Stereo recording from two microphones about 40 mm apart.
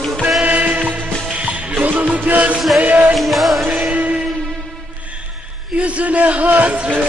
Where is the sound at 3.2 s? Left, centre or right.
Centre.